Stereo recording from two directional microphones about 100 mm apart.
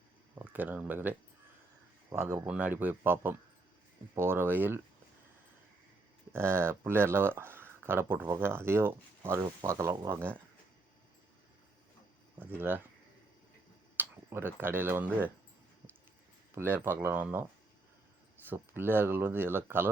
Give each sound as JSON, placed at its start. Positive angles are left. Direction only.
{"t": 0.3, "sound": "speech", "side_deg": -15}
{"t": 2.0, "sound": "speech", "side_deg": -30}
{"t": 2.5, "sound": "speech", "side_deg": -15}
{"t": 6.3, "sound": "speech", "side_deg": -25}
{"t": 12.5, "sound": "speech", "side_deg": -20}
{"t": 13.9, "sound": "speech", "side_deg": -20}
{"t": 16.6, "sound": "speech", "side_deg": -20}
{"t": 18.4, "sound": "speech", "side_deg": -20}